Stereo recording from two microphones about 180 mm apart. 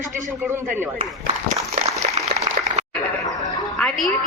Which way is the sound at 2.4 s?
40° right (ahead or behind).